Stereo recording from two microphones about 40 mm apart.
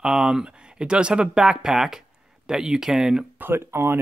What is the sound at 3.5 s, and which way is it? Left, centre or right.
Speech, right.